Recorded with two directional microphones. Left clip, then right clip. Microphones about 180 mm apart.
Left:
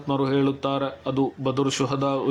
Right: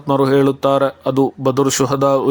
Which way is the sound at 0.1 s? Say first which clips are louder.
Right 9 dB; 40° right (ahead or behind).